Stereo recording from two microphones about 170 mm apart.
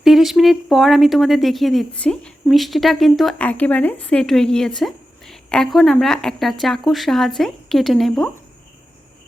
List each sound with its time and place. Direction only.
0.0 s speech: centre (ahead or behind)